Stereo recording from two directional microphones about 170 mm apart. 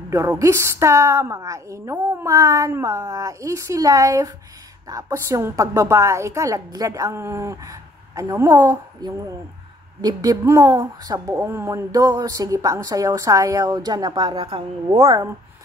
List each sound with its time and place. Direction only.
0.1 s a woman's voice: 20° right (ahead or behind)